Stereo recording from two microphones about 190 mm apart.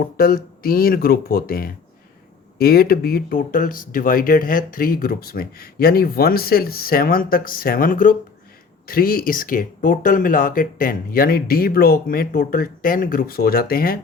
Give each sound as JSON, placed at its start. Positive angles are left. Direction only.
{"t": 0.2, "sound": "speech", "side_deg": 50}